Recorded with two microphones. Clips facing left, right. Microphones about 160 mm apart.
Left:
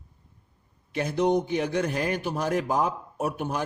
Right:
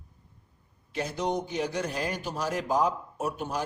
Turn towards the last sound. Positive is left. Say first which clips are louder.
# left 3 dB
turn(degrees=60)  # may be behind; listen again after turning